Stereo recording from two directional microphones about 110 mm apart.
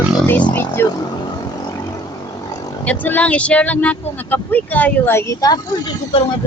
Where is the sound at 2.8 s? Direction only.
15° left (ahead or behind); by 6.2 s 40° left (ahead or behind).